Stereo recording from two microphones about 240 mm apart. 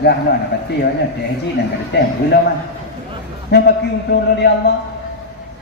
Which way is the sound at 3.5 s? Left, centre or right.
Left.